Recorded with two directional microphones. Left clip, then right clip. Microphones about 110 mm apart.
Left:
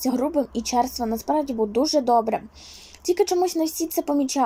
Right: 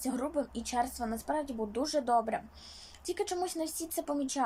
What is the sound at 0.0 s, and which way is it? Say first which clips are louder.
Speech: left 11 dB; 40° left (ahead or behind).